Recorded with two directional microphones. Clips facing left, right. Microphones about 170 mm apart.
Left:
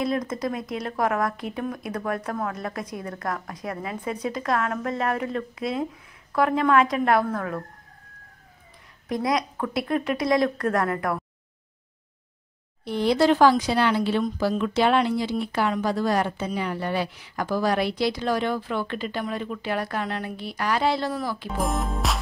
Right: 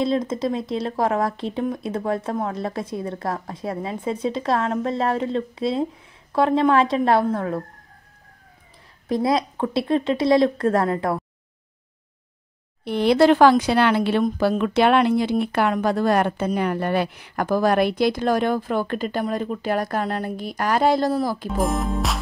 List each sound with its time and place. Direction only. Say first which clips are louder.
0.0 s speech: right 4 dB; 25° right (ahead or behind)
9.1 s speech: right 4 dB; 30° right (ahead or behind)
12.8 s speech: right 4 dB; 65° right (ahead or behind); by 21.5 s 40° right (ahead or behind)
21.5 s speech: right 4 dB; centre (ahead or behind)